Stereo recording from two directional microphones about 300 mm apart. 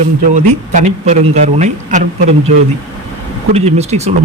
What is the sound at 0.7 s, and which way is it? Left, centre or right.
Speech, right.